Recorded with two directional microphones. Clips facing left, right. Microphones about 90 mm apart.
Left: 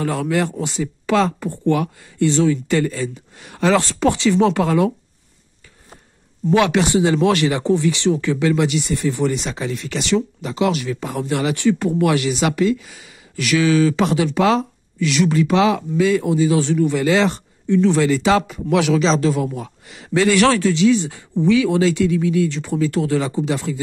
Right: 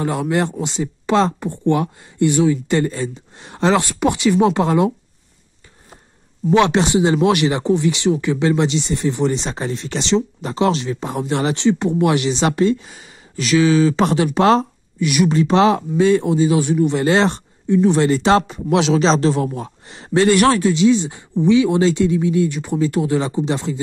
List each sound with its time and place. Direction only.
0.0 s speech: 20° right (ahead or behind)
6.5 s speech: 25° right (ahead or behind)
14.0 s speech: 40° right (ahead or behind)
15.0 s speech: 20° right (ahead or behind)
15.3 s speech: 35° right (ahead or behind)
17.0 s speech: 35° right (ahead or behind)
17.6 s speech: 20° right (ahead or behind)
18.0 s speech: 35° right (ahead or behind)
18.9 s speech: 35° right (ahead or behind)
20.3 s speech: 20° right (ahead or behind)